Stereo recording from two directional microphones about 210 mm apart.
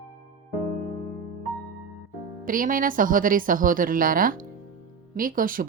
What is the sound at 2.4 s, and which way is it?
Speech, 40° right (ahead or behind).